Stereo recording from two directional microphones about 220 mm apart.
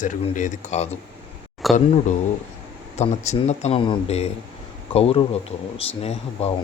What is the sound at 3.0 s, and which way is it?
Speech, 30° left (ahead or behind).